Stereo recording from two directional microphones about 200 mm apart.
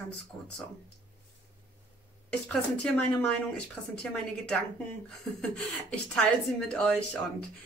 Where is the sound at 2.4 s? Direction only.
5° left (ahead or behind).